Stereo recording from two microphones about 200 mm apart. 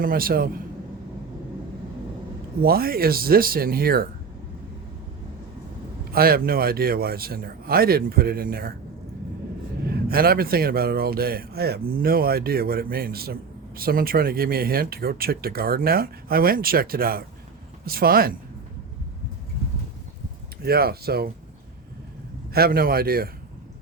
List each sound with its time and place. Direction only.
0.0 s a man's voice: 45° right (ahead or behind)
2.6 s a man's voice: 50° right (ahead or behind)
6.1 s a man's voice: 50° right (ahead or behind)
9.8 s a man's voice: 50° right (ahead or behind)
20.6 s a man's voice: 50° right (ahead or behind)
22.5 s a man's voice: 50° right (ahead or behind)